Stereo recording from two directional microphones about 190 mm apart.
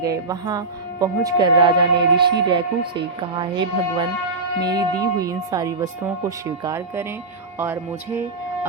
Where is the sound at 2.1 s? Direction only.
60° right (ahead or behind).